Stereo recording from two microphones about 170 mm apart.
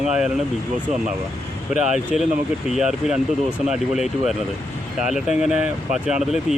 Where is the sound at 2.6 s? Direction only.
5° right (ahead or behind).